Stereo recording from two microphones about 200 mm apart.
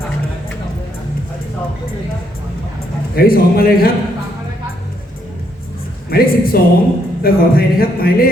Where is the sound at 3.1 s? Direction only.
50° left (ahead or behind).